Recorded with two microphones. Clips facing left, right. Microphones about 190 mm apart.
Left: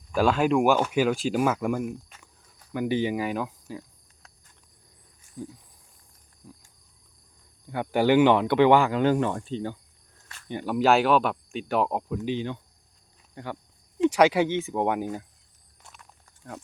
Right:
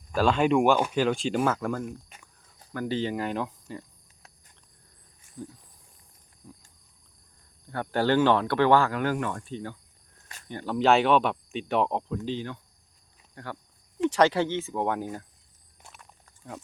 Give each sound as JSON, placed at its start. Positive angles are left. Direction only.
{"t": 0.1, "sound": "speech", "side_deg": 10}
{"t": 5.4, "sound": "speech", "side_deg": 10}
{"t": 7.7, "sound": "speech", "side_deg": 15}
{"t": 10.5, "sound": "speech", "side_deg": 15}
{"t": 10.8, "sound": "speech", "side_deg": 0}